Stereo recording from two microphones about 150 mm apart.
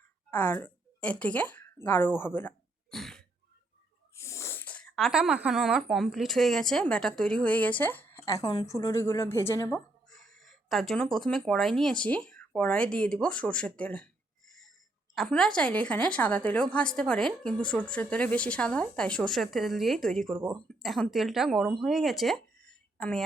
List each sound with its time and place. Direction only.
0.3 s a woman's voice: 10° left (ahead or behind)
2.9 s throat clearing: 5° left (ahead or behind)
4.1 s speech: 20° left (ahead or behind)
8.2 s a woman's voice: 25° left (ahead or behind); by 23.2 s 5° left (ahead or behind)